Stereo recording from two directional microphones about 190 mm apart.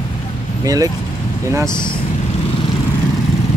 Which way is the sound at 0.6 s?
20° right (ahead or behind).